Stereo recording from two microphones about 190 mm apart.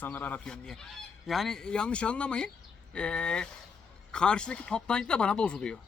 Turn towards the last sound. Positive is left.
turn(degrees=5)  # may be behind; listen again after turning